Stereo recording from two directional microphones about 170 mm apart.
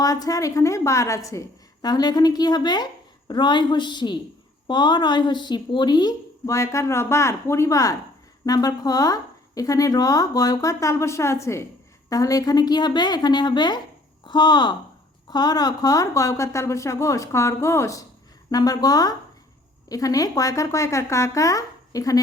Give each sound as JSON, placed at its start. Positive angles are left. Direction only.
{"t": 0.0, "sound": "a woman's voice", "side_deg": 20}